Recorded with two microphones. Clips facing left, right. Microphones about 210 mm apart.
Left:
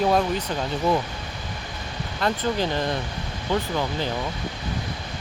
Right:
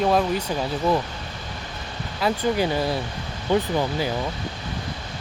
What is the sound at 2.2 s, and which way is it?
Speech, 10° right (ahead or behind).